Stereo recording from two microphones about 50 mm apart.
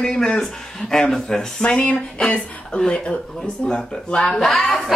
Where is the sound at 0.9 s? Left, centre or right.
Centre.